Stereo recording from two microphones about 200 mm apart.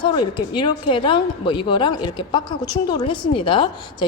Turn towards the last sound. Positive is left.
turn(degrees=25)  # may be behind; listen again after turning